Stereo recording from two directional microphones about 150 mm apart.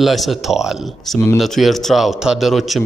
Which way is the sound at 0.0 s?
Centre (ahead or behind).